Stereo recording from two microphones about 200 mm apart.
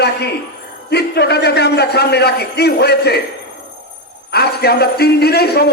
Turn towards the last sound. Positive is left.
turn(degrees=55)  # may be behind; listen again after turning